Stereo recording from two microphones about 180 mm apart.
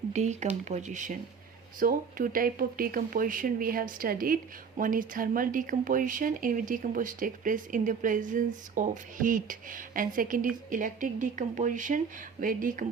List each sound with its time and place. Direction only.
0.1 s speech: 40° right (ahead or behind)